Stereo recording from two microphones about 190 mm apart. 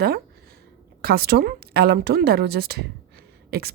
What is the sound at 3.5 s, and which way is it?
Beatboxing, 55° right (ahead or behind).